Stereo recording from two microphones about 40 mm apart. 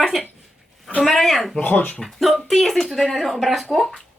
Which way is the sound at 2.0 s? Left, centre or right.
Centre.